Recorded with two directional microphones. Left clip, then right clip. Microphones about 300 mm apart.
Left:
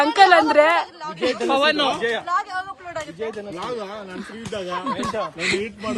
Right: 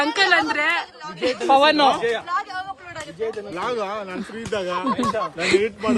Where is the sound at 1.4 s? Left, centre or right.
Right.